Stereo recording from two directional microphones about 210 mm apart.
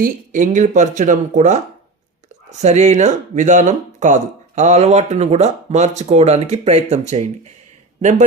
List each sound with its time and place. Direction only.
0.0 s speech: 35° right (ahead or behind)